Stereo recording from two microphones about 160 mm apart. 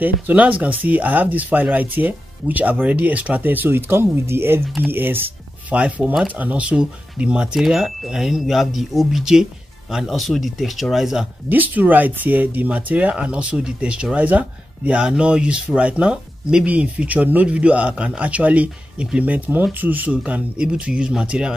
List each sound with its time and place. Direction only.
0.0 s speech: 10° right (ahead or behind)